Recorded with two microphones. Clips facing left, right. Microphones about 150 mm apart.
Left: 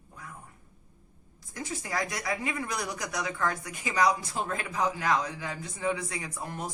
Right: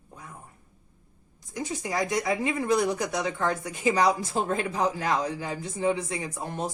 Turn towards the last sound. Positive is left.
turn(degrees=-25)  # may be behind; listen again after turning